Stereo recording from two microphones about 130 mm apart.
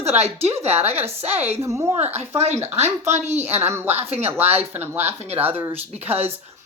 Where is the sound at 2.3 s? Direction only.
55° right (ahead or behind).